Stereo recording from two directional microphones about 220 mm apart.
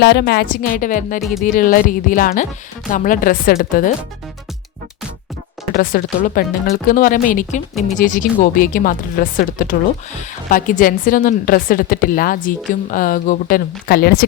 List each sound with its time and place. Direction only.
0.0 s a woman's voice: 50° left (ahead or behind)
1.2 s speech: centre (ahead or behind)
1.5 s a woman's voice: 40° left (ahead or behind)
5.7 s a woman's voice: 40° left (ahead or behind)